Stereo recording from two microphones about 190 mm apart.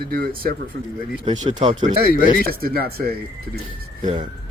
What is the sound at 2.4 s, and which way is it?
Speech, 50° right (ahead or behind).